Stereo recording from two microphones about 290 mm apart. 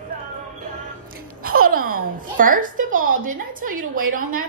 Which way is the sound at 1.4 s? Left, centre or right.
Right.